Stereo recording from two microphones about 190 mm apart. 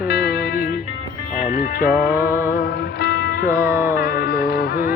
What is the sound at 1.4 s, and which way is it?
Speech, 45° left (ahead or behind).